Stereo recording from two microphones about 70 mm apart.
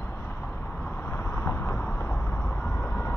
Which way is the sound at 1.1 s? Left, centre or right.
Left.